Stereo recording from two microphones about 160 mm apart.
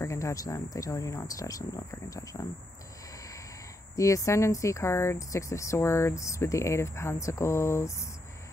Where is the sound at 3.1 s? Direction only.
20° left (ahead or behind).